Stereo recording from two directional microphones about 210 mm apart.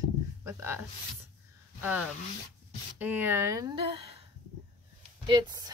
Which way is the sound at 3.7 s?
25° right (ahead or behind).